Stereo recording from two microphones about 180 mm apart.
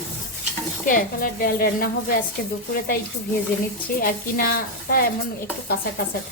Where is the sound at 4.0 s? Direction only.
55° left (ahead or behind).